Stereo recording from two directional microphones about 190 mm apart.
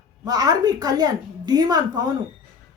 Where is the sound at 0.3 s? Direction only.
20° right (ahead or behind).